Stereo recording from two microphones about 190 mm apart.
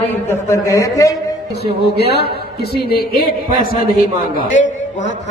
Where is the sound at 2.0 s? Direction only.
60° left (ahead or behind).